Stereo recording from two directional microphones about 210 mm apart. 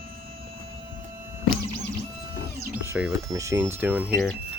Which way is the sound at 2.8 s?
10° right (ahead or behind).